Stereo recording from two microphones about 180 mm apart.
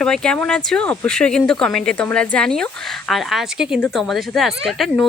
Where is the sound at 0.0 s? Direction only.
5° left (ahead or behind).